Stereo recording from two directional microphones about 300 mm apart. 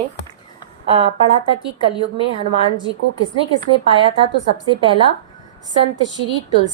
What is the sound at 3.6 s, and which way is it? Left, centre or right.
Speech, centre.